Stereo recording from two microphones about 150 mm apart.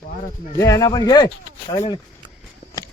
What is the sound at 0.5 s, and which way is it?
Speech, 20° left (ahead or behind).